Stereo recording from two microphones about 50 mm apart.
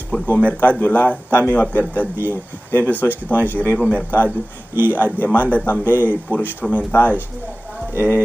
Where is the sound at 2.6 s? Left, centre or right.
Left.